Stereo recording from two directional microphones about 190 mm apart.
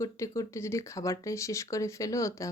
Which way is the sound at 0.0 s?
15° left (ahead or behind).